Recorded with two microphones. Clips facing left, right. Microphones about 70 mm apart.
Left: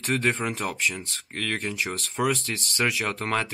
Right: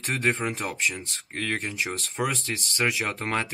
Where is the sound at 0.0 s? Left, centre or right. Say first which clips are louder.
Left 1 dB; centre.